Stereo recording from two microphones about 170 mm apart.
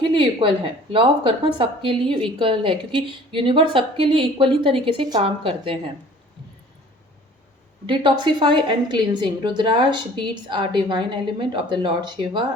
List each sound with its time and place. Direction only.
0.0 s a woman's voice: 30° right (ahead or behind)
7.9 s a woman's voice: 25° right (ahead or behind)